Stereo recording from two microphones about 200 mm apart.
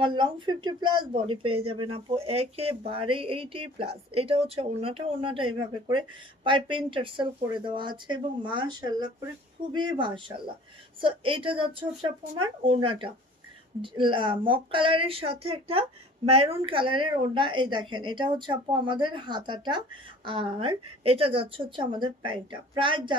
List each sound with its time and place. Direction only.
0.0 s speech: 25° right (ahead or behind)